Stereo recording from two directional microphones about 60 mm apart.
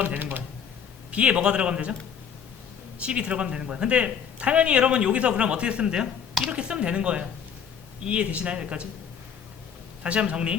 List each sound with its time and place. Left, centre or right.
0.0 s speech: right
1.1 s speech: centre
3.0 s a man's voice: centre
10.0 s a man's voice: centre